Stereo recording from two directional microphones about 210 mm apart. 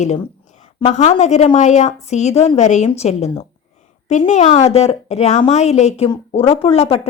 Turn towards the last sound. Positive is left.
turn(degrees=30)  # may be behind; listen again after turning